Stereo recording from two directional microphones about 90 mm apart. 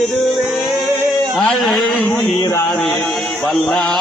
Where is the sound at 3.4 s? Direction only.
5° left (ahead or behind).